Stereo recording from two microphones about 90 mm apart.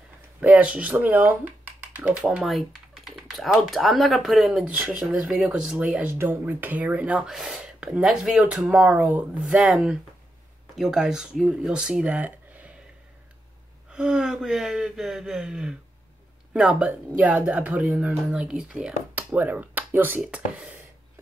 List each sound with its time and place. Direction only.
0.4 s speech: 15° right (ahead or behind)
4.6 s speech: 15° right (ahead or behind)
7.2 s speech: 5° right (ahead or behind)
9.4 s speech: 5° right (ahead or behind)
13.9 s speech: 10° right (ahead or behind)